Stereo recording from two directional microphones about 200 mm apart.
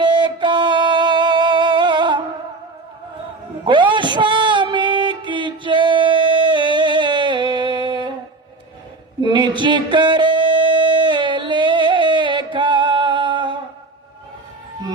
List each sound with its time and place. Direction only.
0.2 s music: 20° right (ahead or behind)
3.7 s music: 25° right (ahead or behind)
9.2 s music: 25° right (ahead or behind)